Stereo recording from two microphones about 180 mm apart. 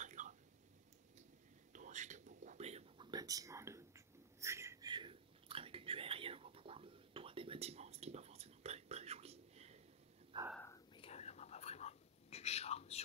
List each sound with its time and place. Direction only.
0.0 s a sound: 45° right (ahead or behind)
1.7 s whispering: 45° right (ahead or behind)
3.1 s whispering: 20° right (ahead or behind)
4.9 s whispering: 30° right (ahead or behind)
11.0 s whispering: 35° left (ahead or behind)